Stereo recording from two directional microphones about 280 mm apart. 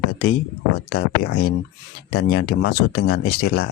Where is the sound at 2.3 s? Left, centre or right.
Left.